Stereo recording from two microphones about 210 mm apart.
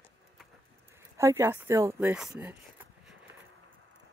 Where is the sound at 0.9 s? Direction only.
15° right (ahead or behind).